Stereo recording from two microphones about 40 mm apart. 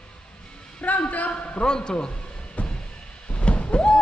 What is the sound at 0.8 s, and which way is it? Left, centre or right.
Speech, left.